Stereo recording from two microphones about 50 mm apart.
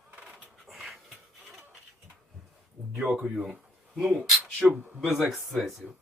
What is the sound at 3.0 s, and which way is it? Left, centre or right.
Speech, right.